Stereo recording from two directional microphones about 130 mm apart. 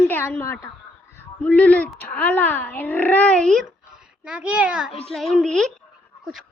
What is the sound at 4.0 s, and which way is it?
Speech, 5° right (ahead or behind).